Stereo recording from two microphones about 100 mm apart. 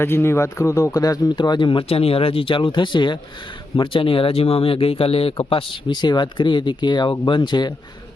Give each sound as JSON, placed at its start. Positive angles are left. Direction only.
{"t": 0.0, "sound": "speech", "side_deg": 25}
{"t": 1.9, "sound": "speech", "side_deg": 75}
{"t": 3.8, "sound": "speech", "side_deg": 60}